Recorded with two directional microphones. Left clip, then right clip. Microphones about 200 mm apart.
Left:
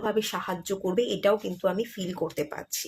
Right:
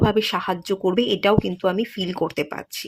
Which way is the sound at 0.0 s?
40° right (ahead or behind).